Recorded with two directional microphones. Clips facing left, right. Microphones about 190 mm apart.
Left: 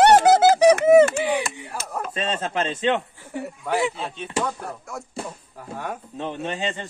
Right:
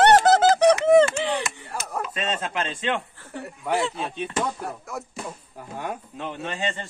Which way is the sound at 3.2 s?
15° left (ahead or behind).